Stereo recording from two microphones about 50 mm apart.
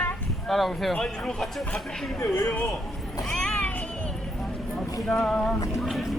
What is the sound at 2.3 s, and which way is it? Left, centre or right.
Speech, left.